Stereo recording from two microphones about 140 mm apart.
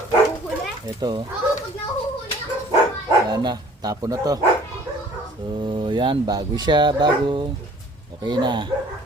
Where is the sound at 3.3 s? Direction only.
30° right (ahead or behind).